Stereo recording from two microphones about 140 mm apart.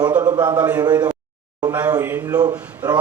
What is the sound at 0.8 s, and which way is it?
Speech, 30° right (ahead or behind).